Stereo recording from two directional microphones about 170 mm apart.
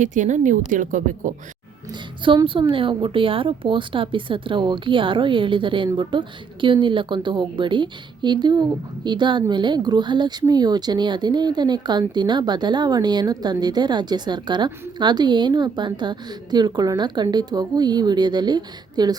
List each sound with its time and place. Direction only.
0.0 s a woman's voice: 45° right (ahead or behind)
1.9 s speech: 30° right (ahead or behind)